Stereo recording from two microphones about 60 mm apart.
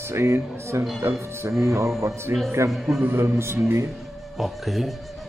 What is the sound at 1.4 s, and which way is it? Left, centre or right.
Speech, right.